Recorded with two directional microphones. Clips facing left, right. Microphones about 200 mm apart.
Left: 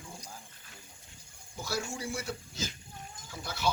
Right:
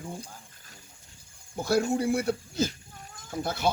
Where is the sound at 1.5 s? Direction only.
55° right (ahead or behind).